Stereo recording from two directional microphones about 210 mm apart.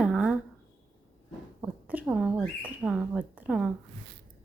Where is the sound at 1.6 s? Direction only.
10° right (ahead or behind).